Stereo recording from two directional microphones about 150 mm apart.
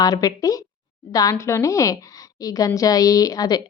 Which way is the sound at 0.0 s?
25° left (ahead or behind).